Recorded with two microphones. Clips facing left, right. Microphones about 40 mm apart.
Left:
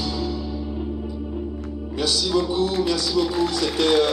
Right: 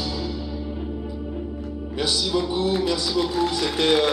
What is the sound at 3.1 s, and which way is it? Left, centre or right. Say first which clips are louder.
Music: left 1 dB; right.